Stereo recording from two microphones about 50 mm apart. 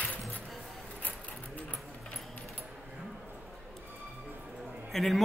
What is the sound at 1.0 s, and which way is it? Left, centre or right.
Sewing machine, left.